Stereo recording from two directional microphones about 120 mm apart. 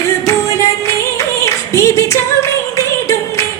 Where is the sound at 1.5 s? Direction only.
25° left (ahead or behind).